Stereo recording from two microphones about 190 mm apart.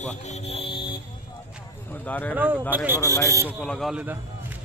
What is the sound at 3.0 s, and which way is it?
Speech, 15° left (ahead or behind).